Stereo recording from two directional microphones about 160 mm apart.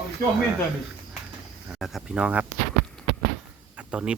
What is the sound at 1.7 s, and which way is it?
Speech, centre (ahead or behind).